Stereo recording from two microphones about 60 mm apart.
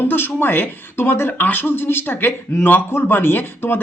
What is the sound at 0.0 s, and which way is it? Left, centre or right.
Speech, left.